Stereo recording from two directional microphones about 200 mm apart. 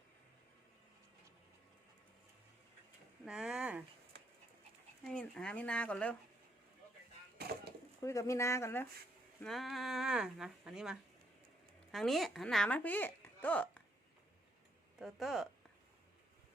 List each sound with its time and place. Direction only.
3.2 s a sound: 5° right (ahead or behind)
5.0 s speech: 5° left (ahead or behind)
7.3 s a sound: 50° right (ahead or behind)
8.0 s speech: 15° left (ahead or behind)
9.4 s a woman's voice: centre (ahead or behind)
14.9 s speech: centre (ahead or behind)